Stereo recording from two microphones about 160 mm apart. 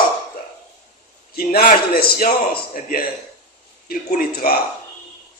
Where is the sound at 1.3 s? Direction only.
70° left (ahead or behind).